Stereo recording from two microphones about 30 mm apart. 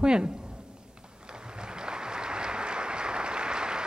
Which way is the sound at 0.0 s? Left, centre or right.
Right.